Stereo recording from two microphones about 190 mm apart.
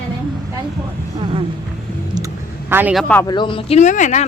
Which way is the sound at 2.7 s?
10° right (ahead or behind).